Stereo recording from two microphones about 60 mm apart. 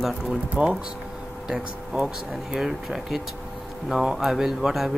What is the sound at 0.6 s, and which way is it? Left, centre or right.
Speech, right.